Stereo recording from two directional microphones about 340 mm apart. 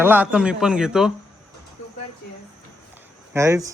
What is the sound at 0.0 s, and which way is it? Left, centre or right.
A man's voice, centre.